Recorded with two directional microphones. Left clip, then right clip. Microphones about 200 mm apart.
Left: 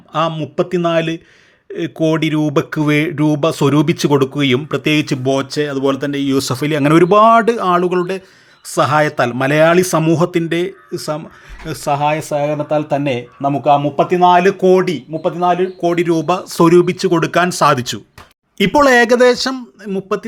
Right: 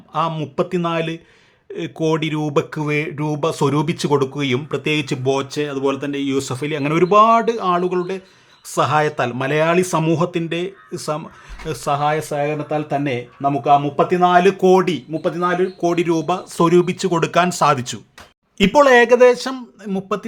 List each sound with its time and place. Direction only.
0.1 s speech: 15° left (ahead or behind)
10.9 s speech: centre (ahead or behind)